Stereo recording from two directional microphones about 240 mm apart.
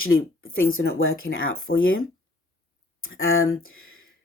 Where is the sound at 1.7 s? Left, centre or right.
Left.